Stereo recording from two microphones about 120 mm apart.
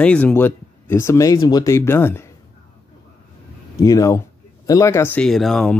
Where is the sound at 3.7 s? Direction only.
25° left (ahead or behind).